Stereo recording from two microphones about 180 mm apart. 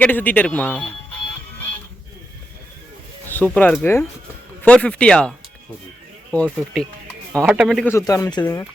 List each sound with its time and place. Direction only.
0.0 s speech: 10° left (ahead or behind)
3.2 s speech: 10° left (ahead or behind)
6.3 s speech: 5° left (ahead or behind)
7.4 s speech: 5° right (ahead or behind)
7.9 s speech: 15° left (ahead or behind)